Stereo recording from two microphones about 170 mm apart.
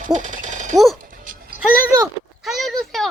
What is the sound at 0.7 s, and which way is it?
Speech, centre (ahead or behind).